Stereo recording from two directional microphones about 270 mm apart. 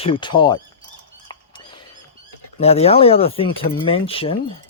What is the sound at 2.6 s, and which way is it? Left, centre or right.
Speech, left.